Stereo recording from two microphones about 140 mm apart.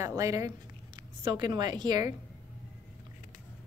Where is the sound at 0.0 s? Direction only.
25° right (ahead or behind).